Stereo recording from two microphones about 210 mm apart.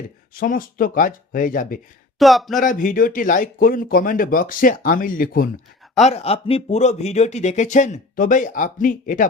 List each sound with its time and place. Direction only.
0.3 s speech: 40° left (ahead or behind)
2.1 s speech: centre (ahead or behind)
2.6 s speech: 40° left (ahead or behind)
6.0 s speech: 30° left (ahead or behind)